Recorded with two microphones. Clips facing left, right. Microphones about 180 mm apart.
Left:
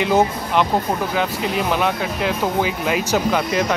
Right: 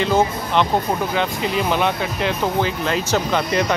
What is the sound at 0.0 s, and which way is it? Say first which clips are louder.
Speech: left 1 dB; 15° left (ahead or behind).